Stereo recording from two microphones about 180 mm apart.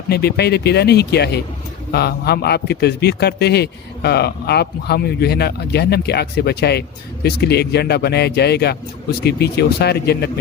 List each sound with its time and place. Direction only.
0.1 s a man's voice: 65° left (ahead or behind)